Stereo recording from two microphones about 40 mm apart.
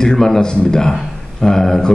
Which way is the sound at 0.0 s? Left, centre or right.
Centre.